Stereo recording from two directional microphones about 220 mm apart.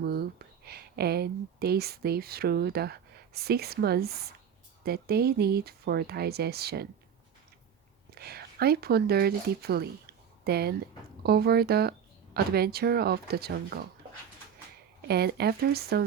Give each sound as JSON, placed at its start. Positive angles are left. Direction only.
{"t": 0.0, "sound": "speech", "side_deg": -45}
{"t": 8.1, "sound": "speech", "side_deg": -45}
{"t": 15.0, "sound": "speech", "side_deg": -45}